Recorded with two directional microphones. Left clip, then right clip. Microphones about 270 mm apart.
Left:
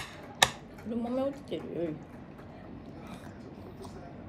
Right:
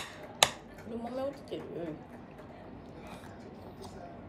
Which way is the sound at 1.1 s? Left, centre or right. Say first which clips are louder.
Left 4 dB; left.